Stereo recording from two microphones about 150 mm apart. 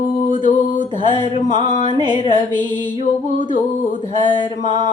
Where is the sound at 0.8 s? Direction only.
30° right (ahead or behind).